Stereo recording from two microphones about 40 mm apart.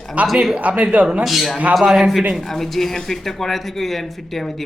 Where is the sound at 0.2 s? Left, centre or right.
Right.